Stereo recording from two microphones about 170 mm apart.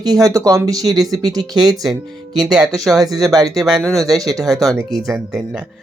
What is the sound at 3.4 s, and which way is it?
Speech, centre (ahead or behind).